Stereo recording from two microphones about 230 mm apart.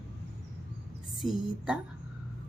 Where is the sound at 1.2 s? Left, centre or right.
Centre.